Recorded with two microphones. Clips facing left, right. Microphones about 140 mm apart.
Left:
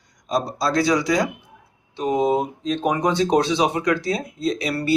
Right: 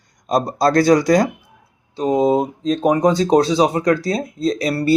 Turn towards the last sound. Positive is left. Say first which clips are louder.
# right 5 dB
turn(degrees=-40)  # may be behind; listen again after turning